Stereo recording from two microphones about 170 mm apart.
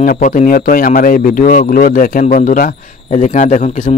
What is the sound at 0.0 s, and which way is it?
Speech, 50° left (ahead or behind).